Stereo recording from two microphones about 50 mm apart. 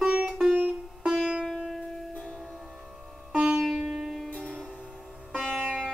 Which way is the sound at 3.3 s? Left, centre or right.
Right.